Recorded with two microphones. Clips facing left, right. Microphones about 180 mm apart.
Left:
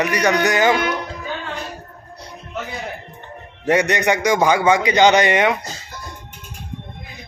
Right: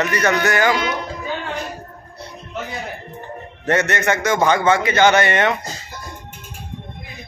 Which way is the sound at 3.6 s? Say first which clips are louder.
Left 2 dB; 15° left (ahead or behind).